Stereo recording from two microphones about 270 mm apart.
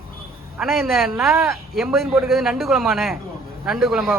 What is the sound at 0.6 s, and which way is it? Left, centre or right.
A man's voice, centre.